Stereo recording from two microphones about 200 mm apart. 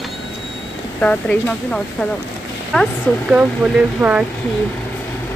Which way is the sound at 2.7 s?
Centre (ahead or behind).